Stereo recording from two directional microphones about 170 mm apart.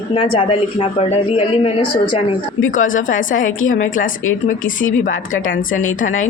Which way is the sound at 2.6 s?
50° left (ahead or behind).